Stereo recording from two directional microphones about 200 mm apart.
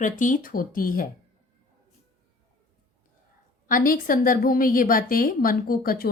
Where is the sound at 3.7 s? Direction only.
45° left (ahead or behind).